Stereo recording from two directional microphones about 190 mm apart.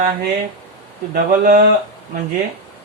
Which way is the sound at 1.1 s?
50° right (ahead or behind).